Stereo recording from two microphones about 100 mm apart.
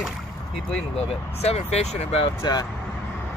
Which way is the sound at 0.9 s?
85° left.